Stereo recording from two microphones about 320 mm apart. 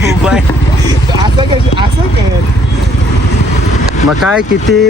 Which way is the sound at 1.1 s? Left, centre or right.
Centre.